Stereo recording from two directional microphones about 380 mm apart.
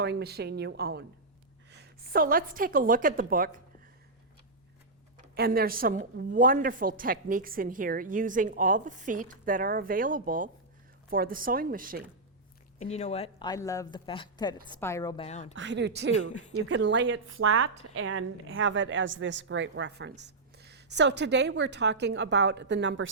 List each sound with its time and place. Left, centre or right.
0.0 s a woman's voice: right
5.1 s a woman's voice: right
12.8 s speech: centre
15.5 s a woman's voice: right